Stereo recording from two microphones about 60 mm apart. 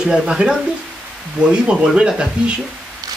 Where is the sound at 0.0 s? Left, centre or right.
Centre.